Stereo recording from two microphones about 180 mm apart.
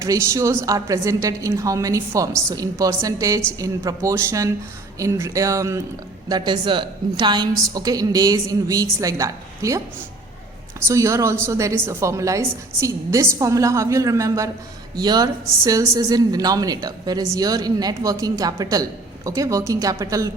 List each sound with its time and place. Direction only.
0.0 s a woman's voice: 15° right (ahead or behind)